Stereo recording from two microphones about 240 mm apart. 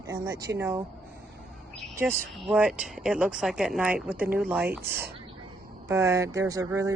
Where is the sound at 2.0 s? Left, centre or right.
Centre.